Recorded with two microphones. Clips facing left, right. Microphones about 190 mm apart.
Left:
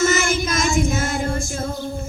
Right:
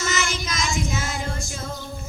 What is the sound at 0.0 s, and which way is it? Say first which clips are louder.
Child singing: left 8 dB; 55° left (ahead or behind).